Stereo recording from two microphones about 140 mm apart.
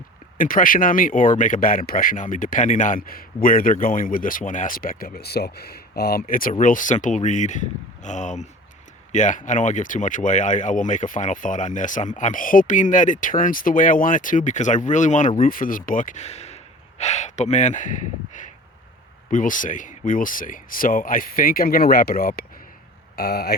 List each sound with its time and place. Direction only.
0.3 s speech: 80° left
6.5 s speech: 70° left (ahead or behind)
15.4 s speech: 80° left